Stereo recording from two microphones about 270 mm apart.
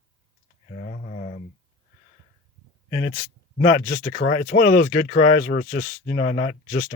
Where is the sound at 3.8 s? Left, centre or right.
Left.